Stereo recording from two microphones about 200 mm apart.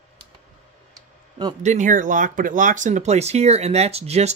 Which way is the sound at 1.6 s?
40° right (ahead or behind).